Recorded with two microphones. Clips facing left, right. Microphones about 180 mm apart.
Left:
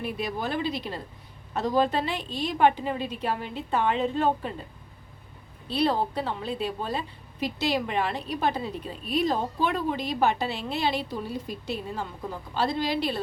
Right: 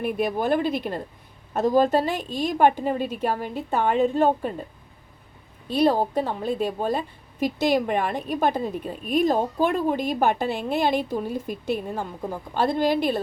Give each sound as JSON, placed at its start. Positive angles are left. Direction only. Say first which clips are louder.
{"t": 0.0, "sound": "a woman's voice", "louder": "right 6 dB", "side_deg": -50}
{"t": 5.7, "sound": "a woman's voice", "louder": "right 5 dB", "side_deg": -45}